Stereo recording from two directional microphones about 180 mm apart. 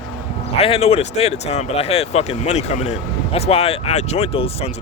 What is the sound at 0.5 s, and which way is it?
Speech, 35° left (ahead or behind).